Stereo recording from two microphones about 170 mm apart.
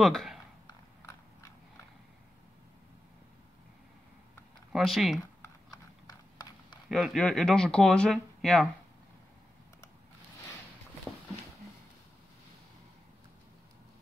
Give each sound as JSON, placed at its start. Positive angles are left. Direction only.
{"t": 0.0, "sound": "speech", "side_deg": 0}
{"t": 0.7, "sound": "biting", "side_deg": 20}
{"t": 4.7, "sound": "speech", "side_deg": 0}
{"t": 6.9, "sound": "speech", "side_deg": 0}